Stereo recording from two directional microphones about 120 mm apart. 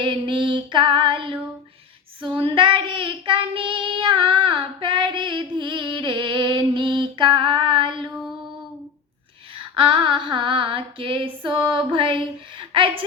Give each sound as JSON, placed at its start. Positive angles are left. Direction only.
{"t": 0.0, "sound": "female singing", "side_deg": -45}
{"t": 2.2, "sound": "child singing", "side_deg": -50}
{"t": 9.7, "sound": "female singing", "side_deg": -45}